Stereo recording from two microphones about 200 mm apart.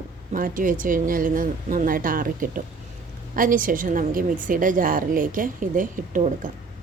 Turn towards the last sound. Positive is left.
turn(degrees=-40)  # may be behind; listen again after turning